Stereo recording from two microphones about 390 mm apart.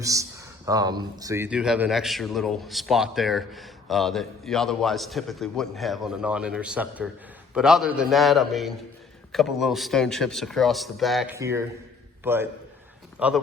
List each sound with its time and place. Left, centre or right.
0.0 s a man's voice: centre